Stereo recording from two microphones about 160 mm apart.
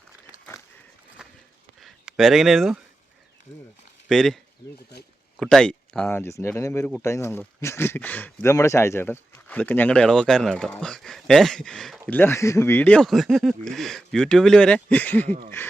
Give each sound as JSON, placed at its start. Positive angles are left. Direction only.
{"t": 1.8, "sound": "speech", "side_deg": 0}
{"t": 4.1, "sound": "speech", "side_deg": 5}
{"t": 5.4, "sound": "speech", "side_deg": 0}